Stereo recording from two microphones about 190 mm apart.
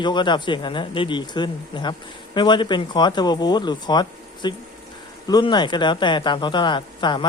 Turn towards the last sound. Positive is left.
turn(degrees=25)  # may be behind; listen again after turning